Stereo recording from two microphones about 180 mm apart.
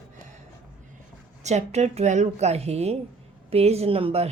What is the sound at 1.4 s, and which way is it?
A woman's voice, 40° right (ahead or behind).